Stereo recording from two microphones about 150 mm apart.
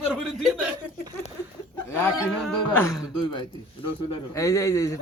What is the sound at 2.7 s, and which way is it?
Speech, 15° left (ahead or behind).